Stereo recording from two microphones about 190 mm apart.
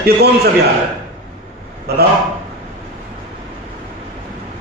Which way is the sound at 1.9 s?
55° right (ahead or behind).